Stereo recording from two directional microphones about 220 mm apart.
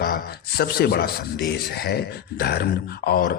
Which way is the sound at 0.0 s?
40° left (ahead or behind).